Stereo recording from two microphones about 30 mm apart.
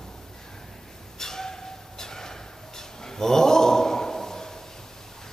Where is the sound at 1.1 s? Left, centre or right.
Centre.